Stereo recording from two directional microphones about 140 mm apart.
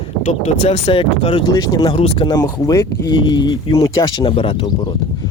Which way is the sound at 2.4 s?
25° left (ahead or behind).